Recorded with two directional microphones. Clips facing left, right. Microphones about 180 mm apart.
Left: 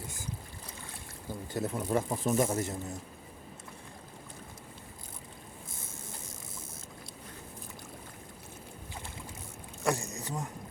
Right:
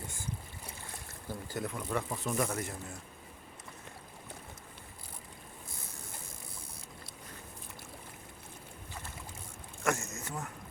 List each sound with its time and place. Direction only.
1.3 s speech: 25° left (ahead or behind)
9.8 s speech: 15° left (ahead or behind)
10.1 s speech: 35° left (ahead or behind)